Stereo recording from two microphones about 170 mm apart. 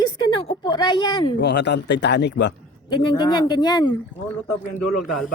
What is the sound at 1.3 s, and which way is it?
Speech, 85° left.